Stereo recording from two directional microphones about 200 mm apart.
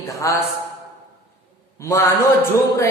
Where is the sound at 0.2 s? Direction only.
15° left (ahead or behind).